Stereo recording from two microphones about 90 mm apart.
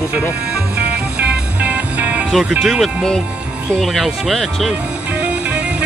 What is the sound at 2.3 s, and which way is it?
Speech, 5° right (ahead or behind).